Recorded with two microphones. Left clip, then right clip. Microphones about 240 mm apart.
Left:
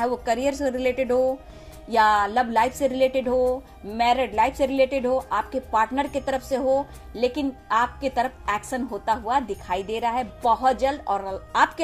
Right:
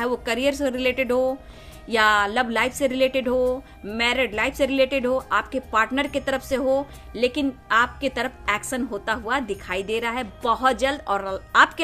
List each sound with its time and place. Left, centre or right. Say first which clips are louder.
0.2 s a woman's voice: right 1 dB; centre